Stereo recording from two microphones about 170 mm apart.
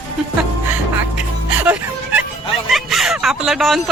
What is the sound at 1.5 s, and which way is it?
Music, 10° right (ahead or behind).